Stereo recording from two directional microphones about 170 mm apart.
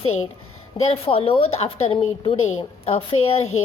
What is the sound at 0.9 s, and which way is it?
A woman's voice, 35° left (ahead or behind).